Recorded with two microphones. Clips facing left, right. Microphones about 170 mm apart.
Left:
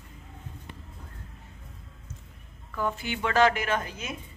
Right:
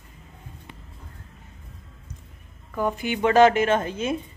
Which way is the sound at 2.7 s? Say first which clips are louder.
Right 5 dB; 15° right (ahead or behind).